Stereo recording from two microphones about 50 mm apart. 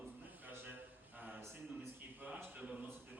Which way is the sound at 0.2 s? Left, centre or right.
Right.